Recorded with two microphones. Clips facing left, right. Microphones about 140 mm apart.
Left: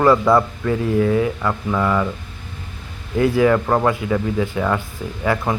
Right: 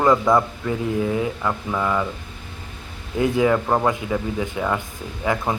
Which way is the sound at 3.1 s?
20° right (ahead or behind).